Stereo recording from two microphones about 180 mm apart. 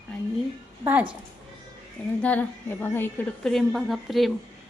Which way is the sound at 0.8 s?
10° right (ahead or behind).